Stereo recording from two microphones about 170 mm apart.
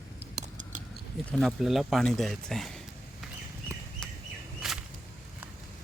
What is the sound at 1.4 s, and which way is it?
Speech, centre (ahead or behind).